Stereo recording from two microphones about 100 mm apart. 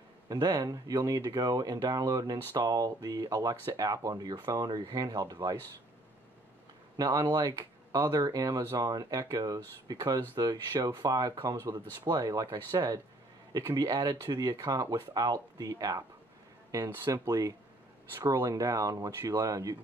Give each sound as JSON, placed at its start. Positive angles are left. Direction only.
{"t": 0.3, "sound": "speech", "side_deg": -40}
{"t": 7.0, "sound": "speech", "side_deg": -40}